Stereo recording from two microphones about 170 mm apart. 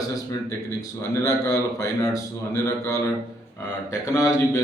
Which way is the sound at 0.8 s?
20° left (ahead or behind).